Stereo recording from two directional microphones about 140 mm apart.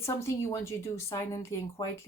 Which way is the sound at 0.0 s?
20° left (ahead or behind).